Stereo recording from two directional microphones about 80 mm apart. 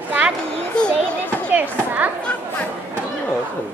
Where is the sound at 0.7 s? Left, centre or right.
Centre.